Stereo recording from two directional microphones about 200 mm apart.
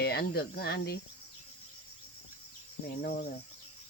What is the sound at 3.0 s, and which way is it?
Speech, 50° left (ahead or behind).